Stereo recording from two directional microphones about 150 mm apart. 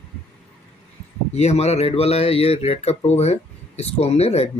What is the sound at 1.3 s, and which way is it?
Speech, 45° left (ahead or behind).